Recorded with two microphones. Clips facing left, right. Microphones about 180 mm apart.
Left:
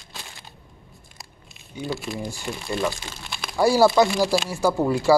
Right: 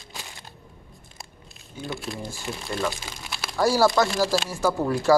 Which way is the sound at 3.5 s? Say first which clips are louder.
Left 3 dB; 10° left (ahead or behind).